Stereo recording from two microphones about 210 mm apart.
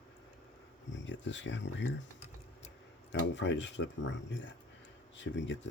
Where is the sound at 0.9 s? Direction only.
60° left (ahead or behind).